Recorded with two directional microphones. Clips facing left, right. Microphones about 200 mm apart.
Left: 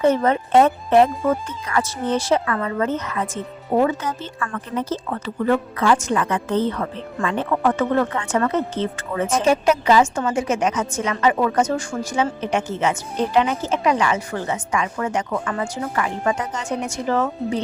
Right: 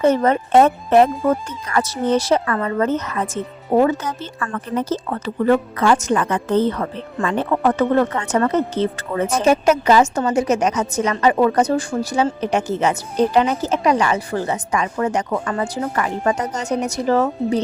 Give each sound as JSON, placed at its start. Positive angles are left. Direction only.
{"t": 0.0, "sound": "a woman's voice", "side_deg": -40}